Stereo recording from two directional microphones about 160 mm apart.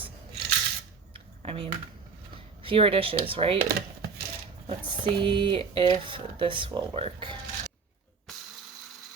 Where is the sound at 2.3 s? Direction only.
35° right (ahead or behind).